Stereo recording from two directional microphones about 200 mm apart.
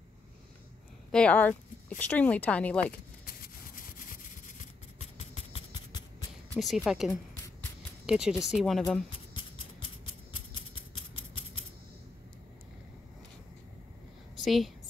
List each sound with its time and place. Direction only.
1.1 s speech: 5° left (ahead or behind)
3.3 s rub: 45° left (ahead or behind)
5.0 s a sound: 30° left (ahead or behind)
6.5 s speech: centre (ahead or behind)
14.4 s a woman's voice: centre (ahead or behind)